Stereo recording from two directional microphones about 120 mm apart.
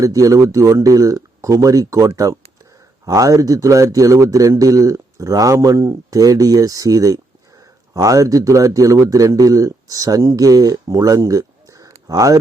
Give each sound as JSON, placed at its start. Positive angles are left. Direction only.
{"t": 0.0, "sound": "speech", "side_deg": -30}